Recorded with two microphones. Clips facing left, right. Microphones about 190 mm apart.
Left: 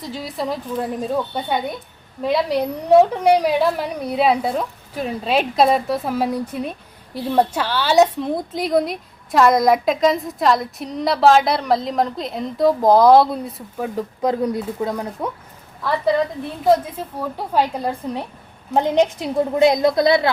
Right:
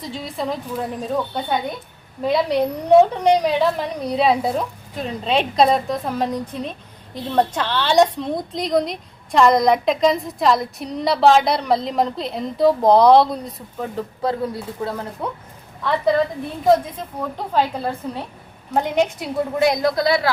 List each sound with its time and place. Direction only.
0.0 s a woman's voice: 5° left (ahead or behind)
16.6 s a woman's voice: 5° left (ahead or behind)